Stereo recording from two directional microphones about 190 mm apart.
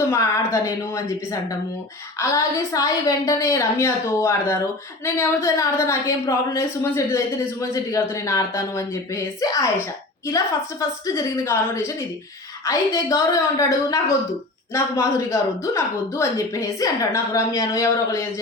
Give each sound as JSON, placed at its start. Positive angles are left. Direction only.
{"t": 0.0, "sound": "a woman's voice", "side_deg": 15}